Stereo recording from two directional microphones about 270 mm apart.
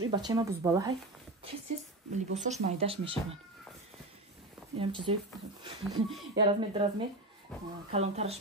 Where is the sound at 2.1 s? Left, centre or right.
Right.